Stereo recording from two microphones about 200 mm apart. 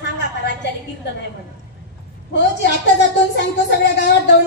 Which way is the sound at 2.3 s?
60° left (ahead or behind).